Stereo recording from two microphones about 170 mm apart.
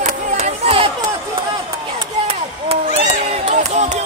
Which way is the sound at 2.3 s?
35° right (ahead or behind).